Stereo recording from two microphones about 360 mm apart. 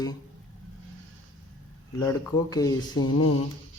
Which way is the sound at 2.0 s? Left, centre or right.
Centre.